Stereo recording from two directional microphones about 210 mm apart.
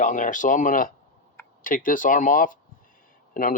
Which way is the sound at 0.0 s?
40° left (ahead or behind).